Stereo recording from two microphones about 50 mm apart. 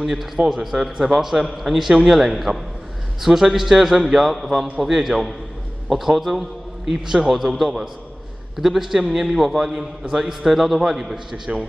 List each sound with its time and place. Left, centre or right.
0.0 s a man's voice: centre
0.4 s a man's voice: centre
0.7 s a man's voice: centre